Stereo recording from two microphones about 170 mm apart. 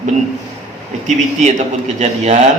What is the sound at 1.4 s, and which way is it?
A man's voice, 40° right (ahead or behind).